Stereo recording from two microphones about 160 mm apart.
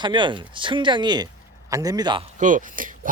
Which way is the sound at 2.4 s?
55° right (ahead or behind).